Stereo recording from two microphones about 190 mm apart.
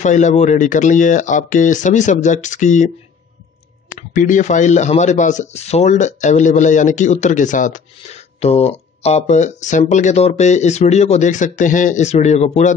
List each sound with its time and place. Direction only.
0.0 s speech: 40° left (ahead or behind)
3.9 s speech: 45° left (ahead or behind)